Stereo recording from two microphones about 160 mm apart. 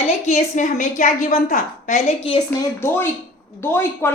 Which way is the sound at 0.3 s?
50° left (ahead or behind).